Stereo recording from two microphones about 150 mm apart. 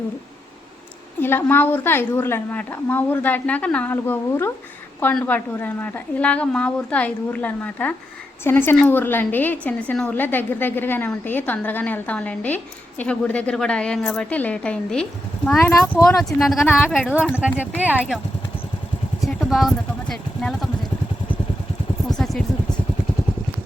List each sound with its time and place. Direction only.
1.2 s a woman's voice: 15° left (ahead or behind)
16.0 s speech: centre (ahead or behind)
19.2 s speech: centre (ahead or behind)
22.2 s vehicle: centre (ahead or behind)